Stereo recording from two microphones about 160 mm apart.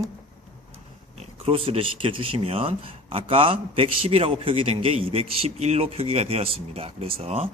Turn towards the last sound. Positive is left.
turn(degrees=-35)  # may be behind; listen again after turning